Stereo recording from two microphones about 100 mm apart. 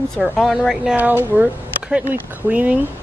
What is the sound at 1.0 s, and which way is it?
Music, 15° right (ahead or behind).